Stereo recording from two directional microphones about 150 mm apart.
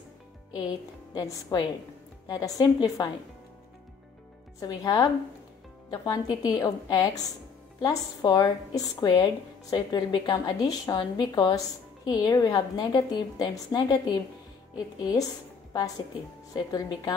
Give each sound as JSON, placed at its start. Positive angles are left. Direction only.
{"t": 0.6, "sound": "speech", "side_deg": 30}
{"t": 4.6, "sound": "a woman's voice", "side_deg": 25}